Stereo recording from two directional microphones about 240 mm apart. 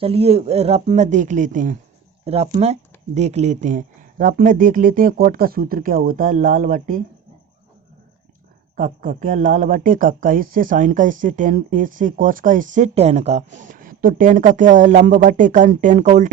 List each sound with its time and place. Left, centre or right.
0.0 s speech: right
8.7 s speech: right